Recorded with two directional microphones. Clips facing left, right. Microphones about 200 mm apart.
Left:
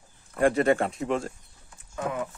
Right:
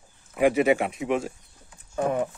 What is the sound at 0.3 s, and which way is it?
Speech, 5° right (ahead or behind).